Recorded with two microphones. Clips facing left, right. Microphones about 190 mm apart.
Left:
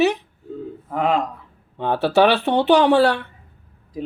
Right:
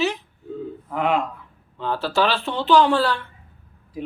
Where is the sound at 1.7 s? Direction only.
60° left (ahead or behind).